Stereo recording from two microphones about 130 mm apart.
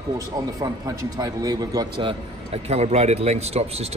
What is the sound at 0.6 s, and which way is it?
A man's voice, 25° right (ahead or behind).